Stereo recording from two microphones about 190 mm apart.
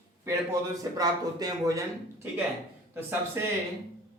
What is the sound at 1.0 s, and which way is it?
Speech, 20° right (ahead or behind).